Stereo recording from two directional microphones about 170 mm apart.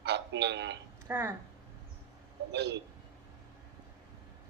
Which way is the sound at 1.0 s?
10° right (ahead or behind).